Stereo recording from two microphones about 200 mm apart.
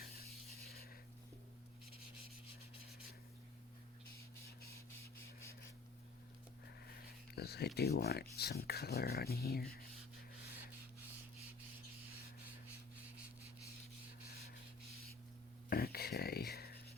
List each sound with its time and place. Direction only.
0.0 s rub: 50° left (ahead or behind)
7.3 s speech: 55° left (ahead or behind)
15.7 s a sound: 50° left (ahead or behind)